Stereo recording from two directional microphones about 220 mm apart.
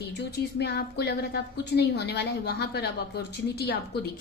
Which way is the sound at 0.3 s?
50° left (ahead or behind).